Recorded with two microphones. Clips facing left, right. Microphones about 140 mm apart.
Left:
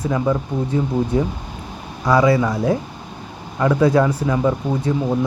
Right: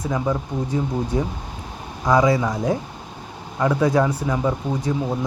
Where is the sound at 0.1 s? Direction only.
10° right (ahead or behind).